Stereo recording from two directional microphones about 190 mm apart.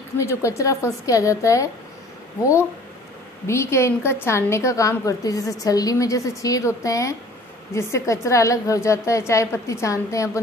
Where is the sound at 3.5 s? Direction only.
15° left (ahead or behind).